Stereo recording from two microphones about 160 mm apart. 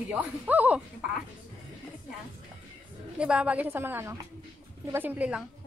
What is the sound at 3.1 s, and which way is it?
A woman's voice, 5° right (ahead or behind).